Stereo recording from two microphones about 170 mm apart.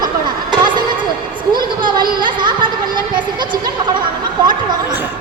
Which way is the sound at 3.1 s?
25° right (ahead or behind).